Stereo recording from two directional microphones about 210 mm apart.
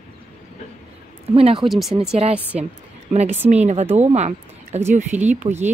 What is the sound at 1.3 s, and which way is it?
Speech, 25° right (ahead or behind).